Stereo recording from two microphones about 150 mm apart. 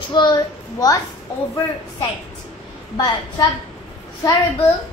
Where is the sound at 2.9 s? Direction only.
25° left (ahead or behind).